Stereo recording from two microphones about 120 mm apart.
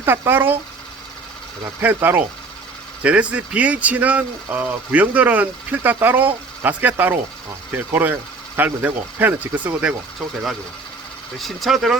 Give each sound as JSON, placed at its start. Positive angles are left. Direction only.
{"t": 0.0, "sound": "speech", "side_deg": -20}
{"t": 1.8, "sound": "speech", "side_deg": -15}
{"t": 11.3, "sound": "speech", "side_deg": 0}